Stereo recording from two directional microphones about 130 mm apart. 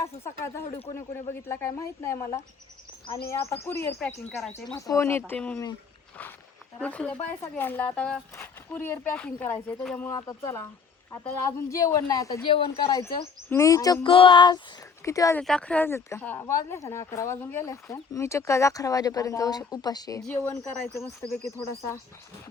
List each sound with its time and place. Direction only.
0.0 s speech: 20° left (ahead or behind)
6.7 s speech: 10° left (ahead or behind)
10.1 s speech: 25° left (ahead or behind)
12.5 s speech: 40° left (ahead or behind)
13.5 s speech: 25° left (ahead or behind)
14.1 s speech: 40° left (ahead or behind)
15.0 s speech: 25° left (ahead or behind)
15.4 s speech: 10° left (ahead or behind); by 20.2 s 30° left (ahead or behind)
20.3 s speech: 15° left (ahead or behind)